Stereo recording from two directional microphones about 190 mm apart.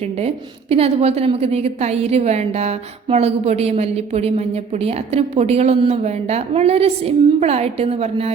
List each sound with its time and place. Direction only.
0.0 s a woman's voice: 30° right (ahead or behind)